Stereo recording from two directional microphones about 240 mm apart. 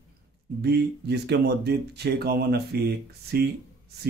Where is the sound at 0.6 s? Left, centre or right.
Right.